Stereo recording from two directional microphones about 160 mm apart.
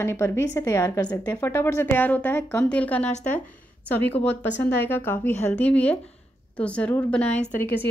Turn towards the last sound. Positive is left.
turn(degrees=10)  # may be behind; listen again after turning